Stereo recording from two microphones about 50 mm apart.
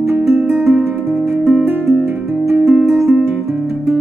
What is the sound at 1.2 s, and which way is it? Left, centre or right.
Music, centre.